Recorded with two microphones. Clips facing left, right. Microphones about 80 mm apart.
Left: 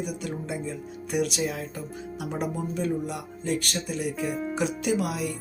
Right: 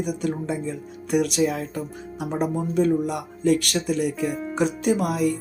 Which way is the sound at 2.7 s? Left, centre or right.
Right.